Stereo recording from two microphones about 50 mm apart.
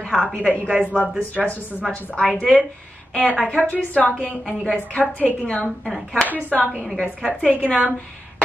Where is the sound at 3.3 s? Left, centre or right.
Left.